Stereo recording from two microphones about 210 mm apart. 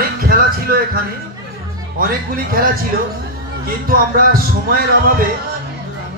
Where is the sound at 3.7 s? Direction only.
45° right (ahead or behind).